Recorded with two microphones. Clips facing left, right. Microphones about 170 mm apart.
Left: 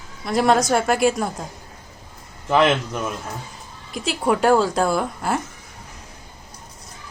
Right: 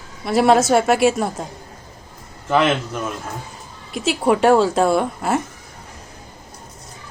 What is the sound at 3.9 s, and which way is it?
Speech, 5° right (ahead or behind).